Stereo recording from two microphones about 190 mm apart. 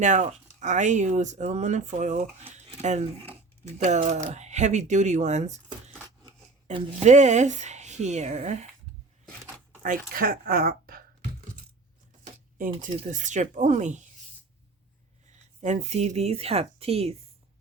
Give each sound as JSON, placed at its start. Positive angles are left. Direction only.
{"t": 0.0, "sound": "speech", "side_deg": -40}
{"t": 2.6, "sound": "a sound", "side_deg": -35}
{"t": 3.8, "sound": "speech", "side_deg": -40}
{"t": 6.7, "sound": "speech", "side_deg": -35}
{"t": 9.8, "sound": "speech", "side_deg": -50}
{"t": 12.2, "sound": "a sound", "side_deg": -45}
{"t": 13.1, "sound": "speech", "side_deg": -40}
{"t": 15.6, "sound": "speech", "side_deg": -35}